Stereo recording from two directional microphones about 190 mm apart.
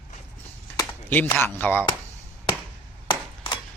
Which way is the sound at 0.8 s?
10° left (ahead or behind).